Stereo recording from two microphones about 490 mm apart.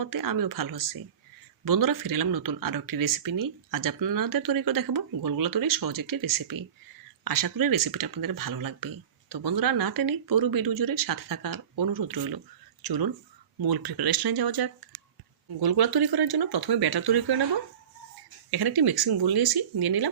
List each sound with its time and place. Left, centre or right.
0.0 s speech: right
18.5 s speech: right